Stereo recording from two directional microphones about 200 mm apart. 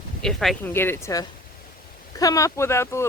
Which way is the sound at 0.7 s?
10° left (ahead or behind).